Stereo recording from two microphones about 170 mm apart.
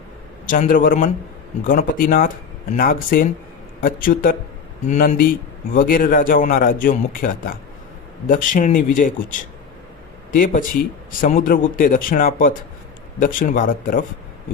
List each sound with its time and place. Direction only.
0.4 s speech: 55° left (ahead or behind)